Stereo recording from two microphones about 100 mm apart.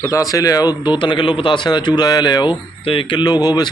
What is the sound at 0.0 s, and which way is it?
Speech, 35° left (ahead or behind).